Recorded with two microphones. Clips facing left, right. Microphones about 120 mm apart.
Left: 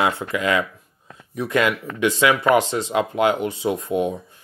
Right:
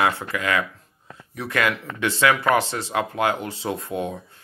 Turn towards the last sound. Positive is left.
turn(degrees=20)  # may be behind; listen again after turning